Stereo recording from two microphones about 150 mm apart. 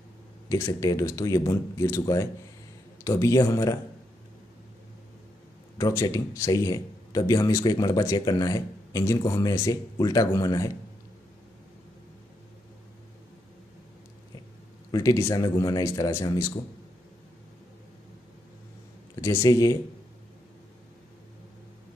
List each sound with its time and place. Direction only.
0.5 s speech: 20° left (ahead or behind)
5.8 s speech: 20° left (ahead or behind)
14.9 s speech: 20° left (ahead or behind)
19.2 s speech: 20° left (ahead or behind)